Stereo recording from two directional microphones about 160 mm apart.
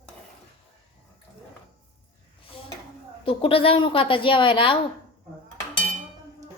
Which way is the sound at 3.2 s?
35° left (ahead or behind).